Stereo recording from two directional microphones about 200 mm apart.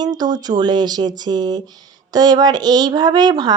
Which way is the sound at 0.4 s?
20° right (ahead or behind).